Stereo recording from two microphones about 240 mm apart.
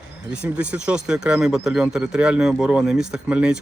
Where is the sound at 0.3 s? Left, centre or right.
Centre.